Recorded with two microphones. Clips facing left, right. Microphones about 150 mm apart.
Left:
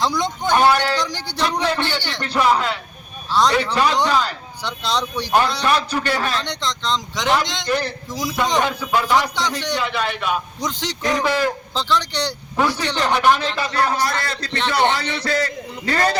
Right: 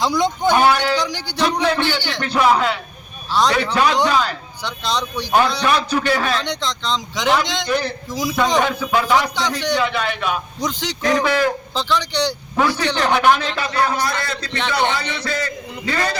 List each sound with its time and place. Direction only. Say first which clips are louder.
0.0 s a man's voice: right 4 dB; 5° right (ahead or behind)
6.0 s a man's voice: right 3 dB; 10° right (ahead or behind)
13.8 s a man's voice: left 1 dB; 35° left (ahead or behind)